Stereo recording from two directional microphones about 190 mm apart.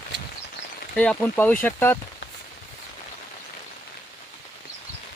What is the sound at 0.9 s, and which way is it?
Speech, 5° left (ahead or behind).